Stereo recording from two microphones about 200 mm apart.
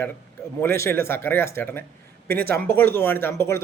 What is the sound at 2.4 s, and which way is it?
Speech, 50° right (ahead or behind).